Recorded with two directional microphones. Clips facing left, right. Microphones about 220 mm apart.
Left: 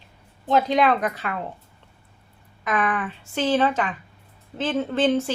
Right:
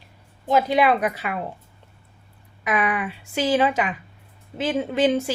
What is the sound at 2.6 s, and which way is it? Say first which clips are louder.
A woman's voice: right 1 dB; 10° right (ahead or behind).